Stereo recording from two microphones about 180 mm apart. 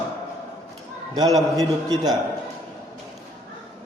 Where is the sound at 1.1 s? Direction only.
20° right (ahead or behind).